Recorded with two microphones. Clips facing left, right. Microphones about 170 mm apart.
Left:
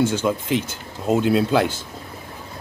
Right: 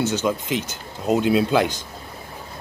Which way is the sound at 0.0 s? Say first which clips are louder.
Left 2 dB; 10° left (ahead or behind).